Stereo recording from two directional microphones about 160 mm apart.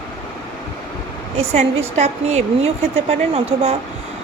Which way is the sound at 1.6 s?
45° right (ahead or behind).